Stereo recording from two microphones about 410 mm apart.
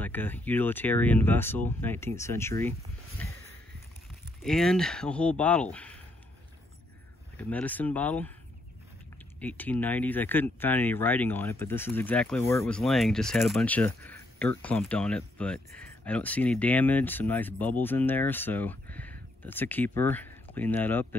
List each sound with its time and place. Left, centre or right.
0.0 s speech: centre
3.2 s a sound: centre
4.4 s speech: centre
7.3 s speech: centre
9.4 s speech: centre